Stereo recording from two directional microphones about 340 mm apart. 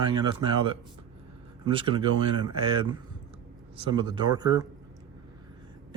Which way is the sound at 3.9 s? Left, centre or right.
Centre.